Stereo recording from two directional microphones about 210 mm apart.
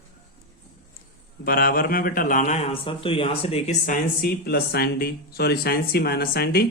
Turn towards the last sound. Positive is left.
turn(degrees=50)  # may be behind; listen again after turning